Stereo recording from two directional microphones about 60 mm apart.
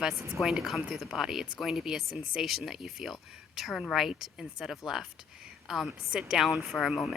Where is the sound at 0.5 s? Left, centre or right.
Centre.